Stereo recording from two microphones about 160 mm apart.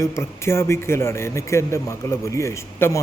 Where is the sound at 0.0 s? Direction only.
15° left (ahead or behind).